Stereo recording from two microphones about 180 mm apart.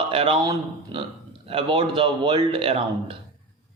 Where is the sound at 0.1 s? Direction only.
30° right (ahead or behind).